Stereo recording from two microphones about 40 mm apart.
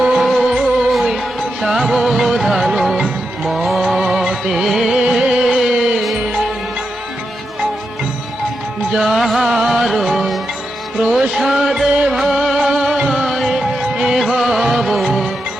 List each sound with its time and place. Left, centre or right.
0.2 s music: centre
8.9 s music: centre
13.9 s music: centre
14.2 s music: centre